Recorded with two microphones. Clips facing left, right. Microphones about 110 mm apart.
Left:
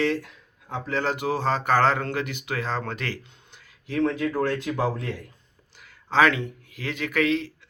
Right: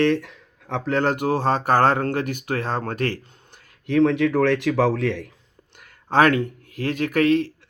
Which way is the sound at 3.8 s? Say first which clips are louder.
Right 6 dB; 70° right (ahead or behind).